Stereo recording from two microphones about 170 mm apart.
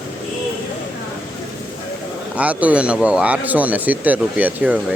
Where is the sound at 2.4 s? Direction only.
10° right (ahead or behind).